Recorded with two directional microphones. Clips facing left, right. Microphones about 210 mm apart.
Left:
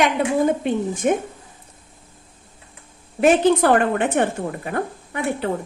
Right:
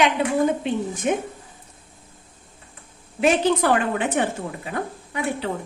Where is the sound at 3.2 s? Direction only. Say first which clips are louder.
Left 4 dB; 55° left (ahead or behind).